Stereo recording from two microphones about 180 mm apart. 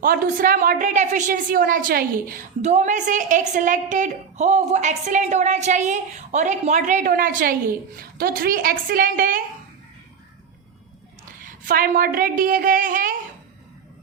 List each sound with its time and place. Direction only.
0.0 s a woman's voice: 55° right (ahead or behind)
2.6 s a woman's voice: 40° right (ahead or behind)
11.3 s a woman's voice: 50° right (ahead or behind)